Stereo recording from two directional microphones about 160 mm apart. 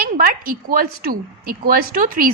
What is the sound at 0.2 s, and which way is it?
A woman's voice, 60° right (ahead or behind).